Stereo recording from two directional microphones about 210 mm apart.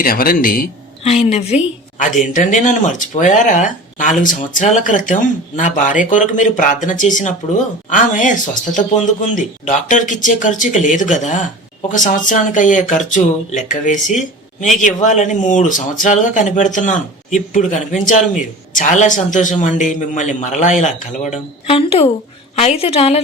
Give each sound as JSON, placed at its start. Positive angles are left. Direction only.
{"t": 0.0, "sound": "a woman's voice", "side_deg": 45}